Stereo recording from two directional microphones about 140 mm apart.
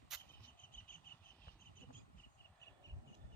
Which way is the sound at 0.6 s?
75° left (ahead or behind).